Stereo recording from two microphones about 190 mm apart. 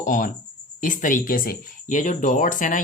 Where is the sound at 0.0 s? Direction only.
45° left (ahead or behind).